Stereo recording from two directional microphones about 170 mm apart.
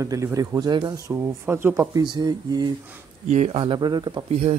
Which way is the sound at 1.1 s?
15° right (ahead or behind).